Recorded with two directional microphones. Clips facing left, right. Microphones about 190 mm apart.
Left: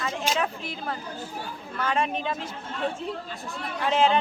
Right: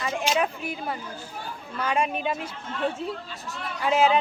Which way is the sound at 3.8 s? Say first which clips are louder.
Right 1 dB; 5° right (ahead or behind).